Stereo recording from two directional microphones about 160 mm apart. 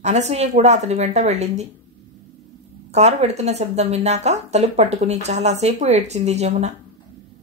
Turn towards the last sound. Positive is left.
turn(degrees=-45)  # may be behind; listen again after turning